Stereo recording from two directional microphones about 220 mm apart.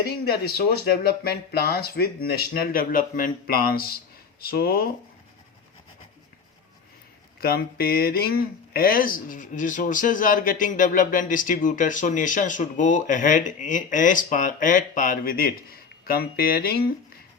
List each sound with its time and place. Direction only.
0.3 s speech: 45° left (ahead or behind)
7.4 s speech: 45° left (ahead or behind)